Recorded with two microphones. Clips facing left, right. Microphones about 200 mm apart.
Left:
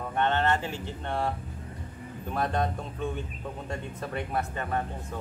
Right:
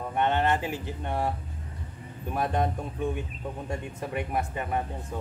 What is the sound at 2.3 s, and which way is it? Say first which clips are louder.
Speech: right 1 dB; 15° right (ahead or behind).